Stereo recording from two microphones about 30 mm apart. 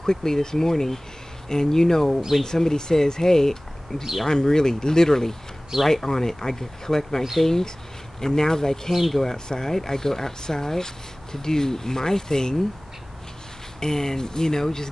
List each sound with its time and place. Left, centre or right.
0.0 s speech: centre
13.7 s speech: centre